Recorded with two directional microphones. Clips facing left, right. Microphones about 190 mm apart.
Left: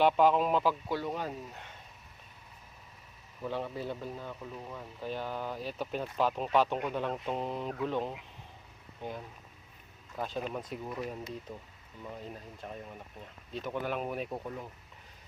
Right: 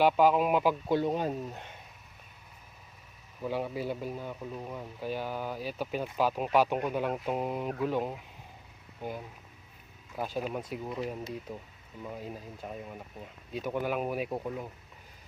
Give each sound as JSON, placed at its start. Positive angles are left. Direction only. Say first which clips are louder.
{"t": 0.0, "sound": "speech", "louder": "right 1 dB", "side_deg": -5}
{"t": 3.4, "sound": "speech", "louder": "right 3 dB", "side_deg": -10}